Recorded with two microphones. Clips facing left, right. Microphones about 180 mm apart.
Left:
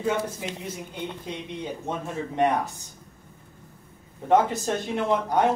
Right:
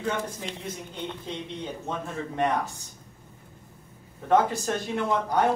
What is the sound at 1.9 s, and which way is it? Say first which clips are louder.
Speech: left 2 dB; 20° left (ahead or behind).